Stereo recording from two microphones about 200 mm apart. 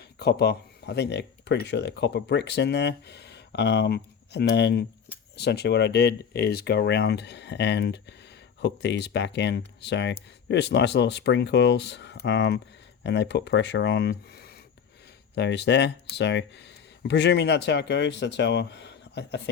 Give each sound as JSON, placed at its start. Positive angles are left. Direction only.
{"t": 0.2, "sound": "speech", "side_deg": 55}